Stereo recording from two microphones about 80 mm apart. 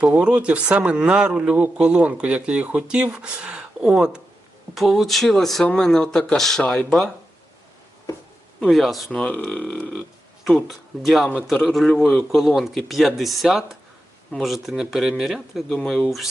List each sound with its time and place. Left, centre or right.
0.0 s speech: centre
6.6 s speech: centre
8.7 s speech: centre
9.1 s speech: centre
10.4 s speech: centre